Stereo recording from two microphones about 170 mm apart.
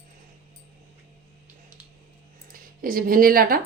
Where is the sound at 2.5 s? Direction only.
55° right (ahead or behind).